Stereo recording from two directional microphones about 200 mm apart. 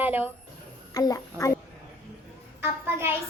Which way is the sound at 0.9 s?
15° left (ahead or behind).